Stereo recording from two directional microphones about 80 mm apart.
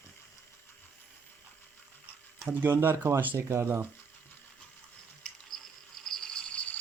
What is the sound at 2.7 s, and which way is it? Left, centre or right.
Speech, right.